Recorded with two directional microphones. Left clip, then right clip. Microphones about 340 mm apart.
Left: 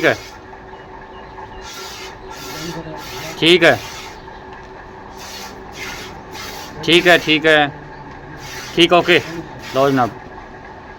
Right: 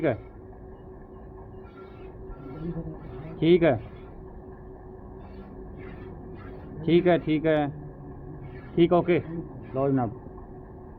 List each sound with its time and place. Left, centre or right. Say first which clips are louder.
3.4 s speech: left 10 dB; centre
6.8 s speech: left 11 dB; centre
8.7 s speech: left 10 dB; centre
9.7 s speech: left 12 dB; centre